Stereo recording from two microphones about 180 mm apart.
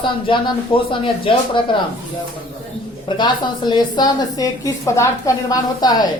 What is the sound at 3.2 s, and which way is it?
A woman's voice, 25° left (ahead or behind).